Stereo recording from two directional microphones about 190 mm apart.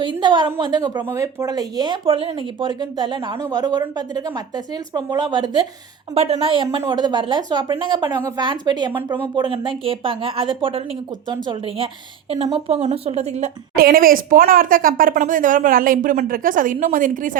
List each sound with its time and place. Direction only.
0.0 s speech: 25° right (ahead or behind)
8.9 s speech: 10° right (ahead or behind)
9.3 s speech: 25° right (ahead or behind)
13.7 s a woman's voice: 50° right (ahead or behind)